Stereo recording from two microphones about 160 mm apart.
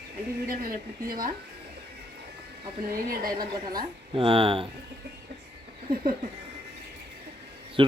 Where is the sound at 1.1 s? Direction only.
60° right (ahead or behind).